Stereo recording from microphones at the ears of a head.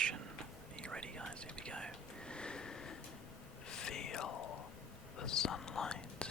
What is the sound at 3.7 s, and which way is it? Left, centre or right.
Whispering, left.